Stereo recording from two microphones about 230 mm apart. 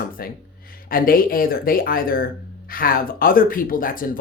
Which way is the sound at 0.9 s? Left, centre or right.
Left.